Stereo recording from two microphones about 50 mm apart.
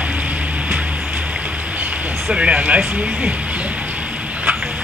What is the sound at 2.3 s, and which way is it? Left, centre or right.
A woman's voice, right.